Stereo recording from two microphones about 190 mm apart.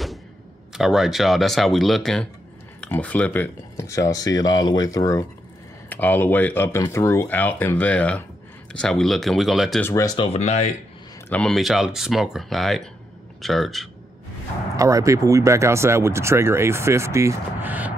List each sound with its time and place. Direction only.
0.7 s speech: centre (ahead or behind)
9.8 s speech: 20° left (ahead or behind); by 10.7 s 35° left (ahead or behind)
11.2 s speech: 5° left (ahead or behind)
14.8 s speech: 15° right (ahead or behind)